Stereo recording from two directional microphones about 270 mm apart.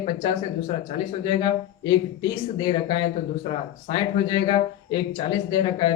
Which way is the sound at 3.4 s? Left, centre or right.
Left.